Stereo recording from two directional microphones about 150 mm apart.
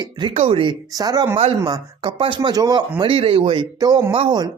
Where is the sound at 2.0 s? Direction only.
35° right (ahead or behind).